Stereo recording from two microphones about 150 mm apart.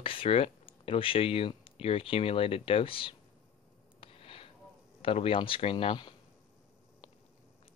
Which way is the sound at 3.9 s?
40° left (ahead or behind).